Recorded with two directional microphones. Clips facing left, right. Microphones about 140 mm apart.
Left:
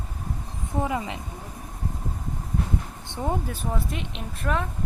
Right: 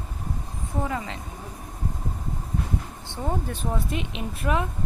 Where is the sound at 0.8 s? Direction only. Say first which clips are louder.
Left 2 dB; 15° left (ahead or behind).